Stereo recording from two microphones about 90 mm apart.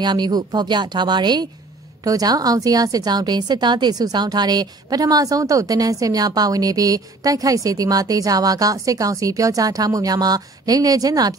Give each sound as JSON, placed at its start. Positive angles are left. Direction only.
{"t": 0.0, "sound": "a woman's voice", "side_deg": -55}
{"t": 2.0, "sound": "a woman's voice", "side_deg": -45}